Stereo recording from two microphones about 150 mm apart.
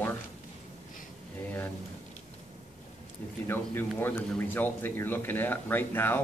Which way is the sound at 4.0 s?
15° left (ahead or behind).